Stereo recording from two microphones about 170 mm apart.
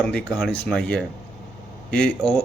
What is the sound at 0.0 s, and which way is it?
Speech, 5° left (ahead or behind).